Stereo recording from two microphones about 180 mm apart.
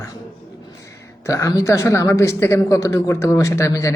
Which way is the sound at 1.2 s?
15° left (ahead or behind).